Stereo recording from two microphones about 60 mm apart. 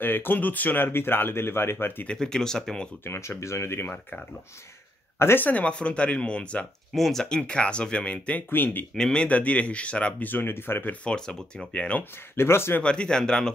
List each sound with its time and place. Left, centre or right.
0.0 s speech: left
2.0 s speech: centre
3.0 s speech: left
3.8 s speech: left
5.2 s speech: left
5.5 s speech: left
6.9 s speech: centre; by 8.5 s left
8.5 s speech: left
8.9 s speech: centre
10.3 s speech: left
11.1 s speech: centre
12.0 s speech: left
12.8 s speech: centre